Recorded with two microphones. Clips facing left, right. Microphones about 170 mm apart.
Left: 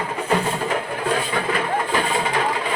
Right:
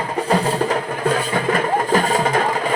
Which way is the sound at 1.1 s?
45° right (ahead or behind).